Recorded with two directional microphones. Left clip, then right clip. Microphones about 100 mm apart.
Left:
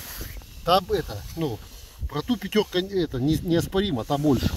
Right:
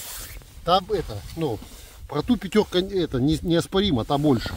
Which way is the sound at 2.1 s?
40° right (ahead or behind).